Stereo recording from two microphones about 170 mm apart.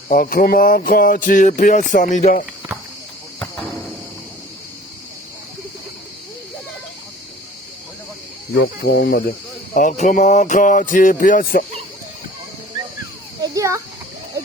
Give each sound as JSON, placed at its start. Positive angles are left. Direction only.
{"t": 0.1, "sound": "speech", "side_deg": 60}
{"t": 8.5, "sound": "speech", "side_deg": 75}
{"t": 9.7, "sound": "speech", "side_deg": 50}
{"t": 13.4, "sound": "a sound", "side_deg": -20}